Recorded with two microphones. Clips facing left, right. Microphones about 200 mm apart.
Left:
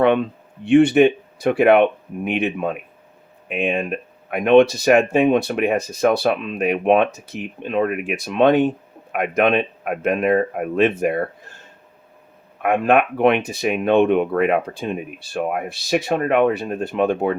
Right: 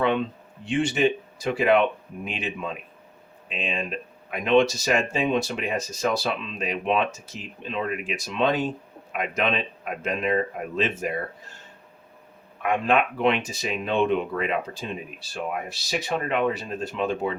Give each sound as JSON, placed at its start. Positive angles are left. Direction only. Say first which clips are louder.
{"t": 0.6, "sound": "speech", "louder": "left 10 dB", "side_deg": 60}
{"t": 12.6, "sound": "speech", "louder": "left 6 dB", "side_deg": 55}